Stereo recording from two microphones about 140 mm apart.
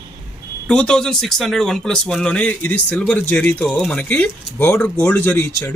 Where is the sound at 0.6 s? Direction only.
5° left (ahead or behind).